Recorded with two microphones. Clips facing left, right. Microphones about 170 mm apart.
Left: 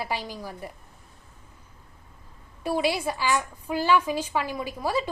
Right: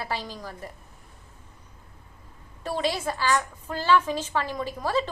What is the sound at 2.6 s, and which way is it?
A woman's voice, 10° left (ahead or behind).